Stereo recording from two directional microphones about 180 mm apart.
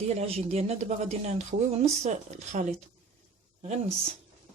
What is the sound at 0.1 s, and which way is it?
Speech, 35° right (ahead or behind).